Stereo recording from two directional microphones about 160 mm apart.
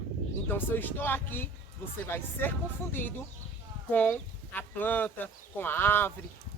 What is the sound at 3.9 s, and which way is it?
Speech, 10° left (ahead or behind).